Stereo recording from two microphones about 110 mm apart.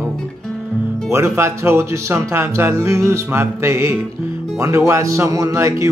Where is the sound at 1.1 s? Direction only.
25° right (ahead or behind).